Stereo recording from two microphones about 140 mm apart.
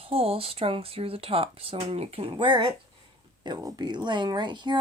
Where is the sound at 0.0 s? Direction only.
45° right (ahead or behind).